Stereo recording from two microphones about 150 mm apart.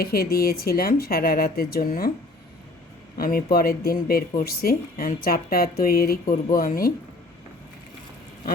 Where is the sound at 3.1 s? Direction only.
80° left.